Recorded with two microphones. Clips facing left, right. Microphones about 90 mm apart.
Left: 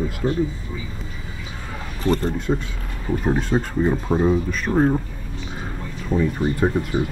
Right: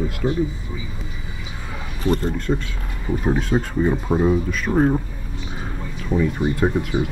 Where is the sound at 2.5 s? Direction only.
20° left (ahead or behind).